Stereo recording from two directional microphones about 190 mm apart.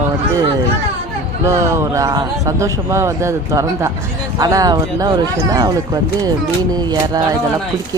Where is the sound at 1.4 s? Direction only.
15° right (ahead or behind).